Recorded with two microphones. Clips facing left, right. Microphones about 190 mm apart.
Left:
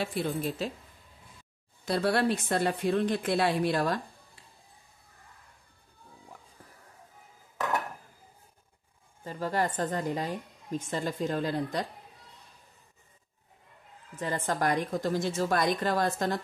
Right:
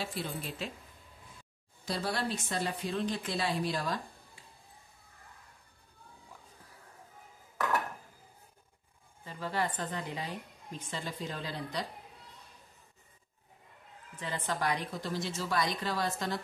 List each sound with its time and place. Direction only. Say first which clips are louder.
0.0 s a woman's voice: left 7 dB; 55° left (ahead or behind)
1.9 s a woman's voice: left 8 dB; 60° left (ahead or behind)
9.2 s a woman's voice: left 5 dB; 45° left (ahead or behind)
14.1 s a woman's voice: left 5 dB; 45° left (ahead or behind)